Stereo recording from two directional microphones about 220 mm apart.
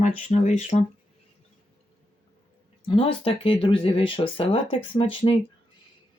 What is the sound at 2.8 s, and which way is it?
Speech, 25° left (ahead or behind).